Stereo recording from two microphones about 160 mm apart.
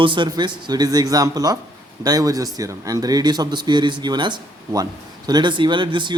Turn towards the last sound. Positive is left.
turn(degrees=-30)  # may be behind; listen again after turning